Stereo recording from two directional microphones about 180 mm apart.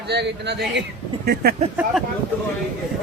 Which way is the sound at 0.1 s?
70° right (ahead or behind).